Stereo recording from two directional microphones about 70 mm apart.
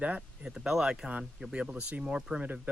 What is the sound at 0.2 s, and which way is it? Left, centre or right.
Speech, centre.